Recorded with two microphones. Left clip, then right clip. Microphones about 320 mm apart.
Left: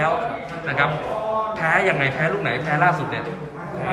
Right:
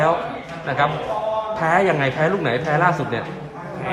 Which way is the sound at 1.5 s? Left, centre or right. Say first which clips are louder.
Right 2 dB; centre.